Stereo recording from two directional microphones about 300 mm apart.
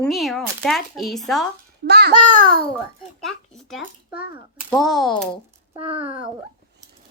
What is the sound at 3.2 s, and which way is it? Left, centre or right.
A child's voice, centre.